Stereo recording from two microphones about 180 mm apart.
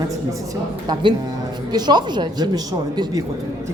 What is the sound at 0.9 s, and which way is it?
Speech, 25° right (ahead or behind).